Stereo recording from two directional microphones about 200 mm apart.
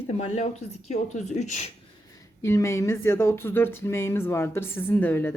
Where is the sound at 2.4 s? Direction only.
15° left (ahead or behind).